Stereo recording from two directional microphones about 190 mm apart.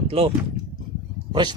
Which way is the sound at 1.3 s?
25° right (ahead or behind).